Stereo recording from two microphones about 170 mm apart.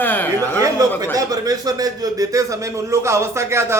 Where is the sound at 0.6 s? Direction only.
20° right (ahead or behind).